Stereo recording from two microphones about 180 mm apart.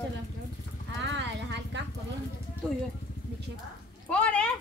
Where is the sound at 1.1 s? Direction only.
80° right.